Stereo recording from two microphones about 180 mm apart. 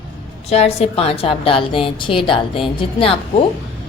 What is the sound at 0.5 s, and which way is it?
A woman's voice, 35° left (ahead or behind).